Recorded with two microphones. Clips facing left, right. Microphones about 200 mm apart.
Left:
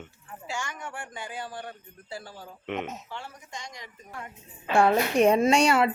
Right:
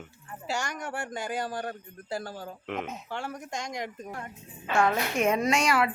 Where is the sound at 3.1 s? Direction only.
50° right (ahead or behind).